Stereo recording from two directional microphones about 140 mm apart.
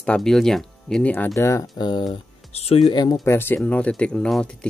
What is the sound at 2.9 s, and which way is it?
Speech, 30° left (ahead or behind).